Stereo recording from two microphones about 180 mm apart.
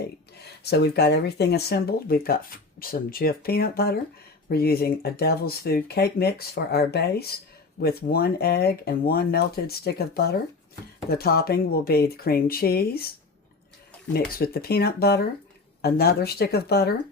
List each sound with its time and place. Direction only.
0.6 s speech: 65° left (ahead or behind)
14.1 s speech: 60° left (ahead or behind)